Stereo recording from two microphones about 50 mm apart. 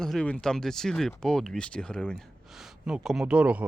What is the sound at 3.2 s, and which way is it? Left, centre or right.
Speech, right.